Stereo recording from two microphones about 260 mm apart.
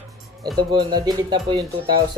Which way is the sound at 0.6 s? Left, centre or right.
Centre.